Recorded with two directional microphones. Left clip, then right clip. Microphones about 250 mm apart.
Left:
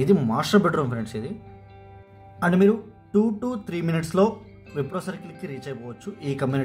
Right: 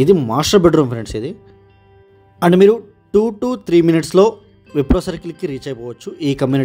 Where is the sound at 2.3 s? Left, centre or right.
Right.